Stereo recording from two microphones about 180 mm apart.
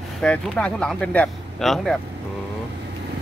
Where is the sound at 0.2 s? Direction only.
5° left (ahead or behind).